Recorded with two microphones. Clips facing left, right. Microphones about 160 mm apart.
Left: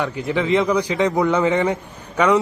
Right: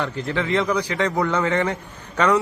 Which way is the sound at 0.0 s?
15° left (ahead or behind).